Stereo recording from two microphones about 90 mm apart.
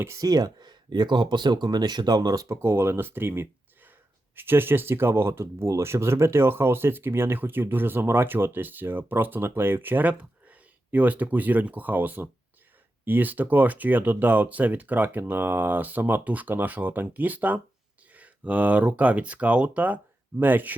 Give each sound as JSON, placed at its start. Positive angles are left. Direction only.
{"t": 0.2, "sound": "speech", "side_deg": -45}
{"t": 2.6, "sound": "speech", "side_deg": -25}